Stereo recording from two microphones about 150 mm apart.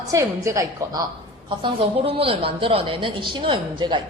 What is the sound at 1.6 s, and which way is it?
A woman's voice, 35° right (ahead or behind).